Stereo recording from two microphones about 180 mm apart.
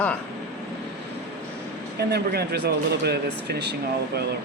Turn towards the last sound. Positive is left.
turn(degrees=-65)  # may be behind; listen again after turning